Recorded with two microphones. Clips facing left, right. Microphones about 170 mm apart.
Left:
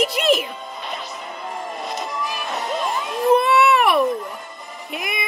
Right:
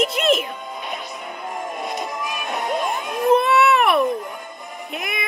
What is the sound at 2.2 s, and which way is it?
Music, 50° right (ahead or behind).